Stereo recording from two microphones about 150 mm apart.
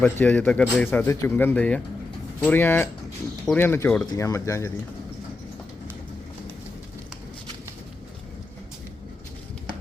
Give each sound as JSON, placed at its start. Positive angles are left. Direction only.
{"t": 0.0, "sound": "speech", "side_deg": 10}
{"t": 4.0, "sound": "speech", "side_deg": 25}